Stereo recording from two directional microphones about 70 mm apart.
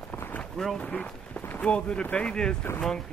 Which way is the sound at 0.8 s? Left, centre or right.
Centre.